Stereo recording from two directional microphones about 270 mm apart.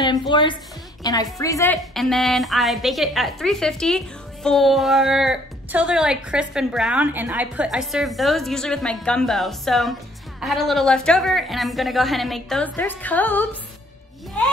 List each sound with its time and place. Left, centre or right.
0.0 s a woman's voice: centre